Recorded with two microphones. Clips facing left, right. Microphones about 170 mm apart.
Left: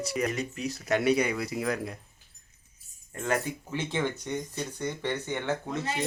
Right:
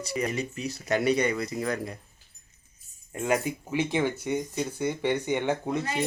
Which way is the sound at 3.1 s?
15° right (ahead or behind).